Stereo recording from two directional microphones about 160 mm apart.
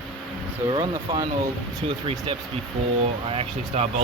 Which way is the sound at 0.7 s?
25° right (ahead or behind).